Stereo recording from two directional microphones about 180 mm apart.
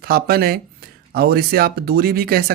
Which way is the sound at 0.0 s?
55° right (ahead or behind).